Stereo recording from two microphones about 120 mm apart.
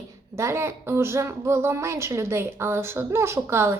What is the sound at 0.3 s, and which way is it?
A woman's voice, 20° right (ahead or behind).